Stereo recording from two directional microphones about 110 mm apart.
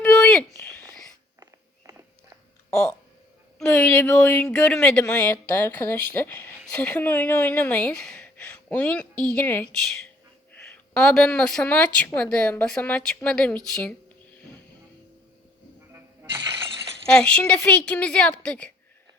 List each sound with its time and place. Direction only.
0.0 s a sound: 10° left (ahead or behind)
0.7 s whispering: 30° right (ahead or behind)
3.6 s a woman's voice: 10° left (ahead or behind)
5.6 s a woman's voice: 20° left (ahead or behind)
17.1 s a woman's voice: 10° left (ahead or behind)